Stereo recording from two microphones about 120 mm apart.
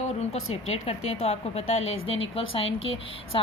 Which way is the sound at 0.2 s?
65° left (ahead or behind).